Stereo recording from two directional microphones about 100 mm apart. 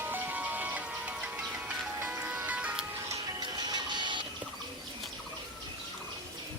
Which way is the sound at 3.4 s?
45° right (ahead or behind).